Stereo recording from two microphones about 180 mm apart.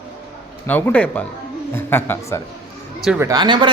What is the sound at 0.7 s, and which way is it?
Speech, 10° left (ahead or behind).